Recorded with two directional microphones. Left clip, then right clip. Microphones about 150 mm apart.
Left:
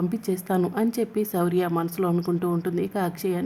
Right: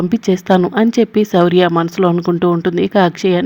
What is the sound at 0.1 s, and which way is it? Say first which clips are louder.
Speech: right 13 dB; 30° right (ahead or behind).